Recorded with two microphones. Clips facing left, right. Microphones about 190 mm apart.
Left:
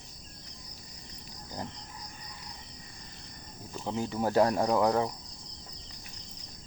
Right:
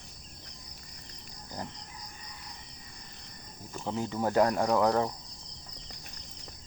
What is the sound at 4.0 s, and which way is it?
Speech, 15° left (ahead or behind).